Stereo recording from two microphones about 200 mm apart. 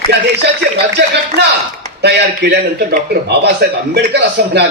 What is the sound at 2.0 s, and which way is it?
Speech, 55° right (ahead or behind).